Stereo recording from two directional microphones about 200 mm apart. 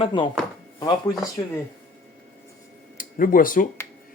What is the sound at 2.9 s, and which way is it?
Speech, 45° left (ahead or behind).